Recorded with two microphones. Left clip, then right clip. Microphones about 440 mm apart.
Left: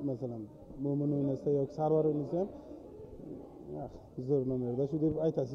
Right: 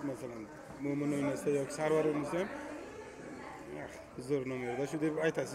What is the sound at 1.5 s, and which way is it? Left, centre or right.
Speech, left.